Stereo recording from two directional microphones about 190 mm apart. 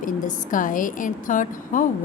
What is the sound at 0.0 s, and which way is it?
A woman's voice, 45° left (ahead or behind).